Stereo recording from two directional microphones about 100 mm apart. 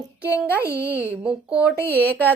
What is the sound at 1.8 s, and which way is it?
Speech, 20° left (ahead or behind).